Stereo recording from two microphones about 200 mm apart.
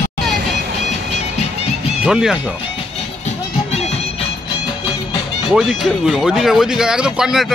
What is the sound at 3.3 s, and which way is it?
Music, 30° left (ahead or behind).